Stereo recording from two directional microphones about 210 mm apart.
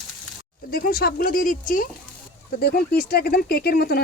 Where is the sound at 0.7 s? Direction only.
45° left (ahead or behind).